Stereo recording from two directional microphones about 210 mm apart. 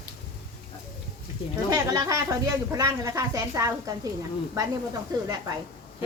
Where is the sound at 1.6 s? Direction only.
15° right (ahead or behind).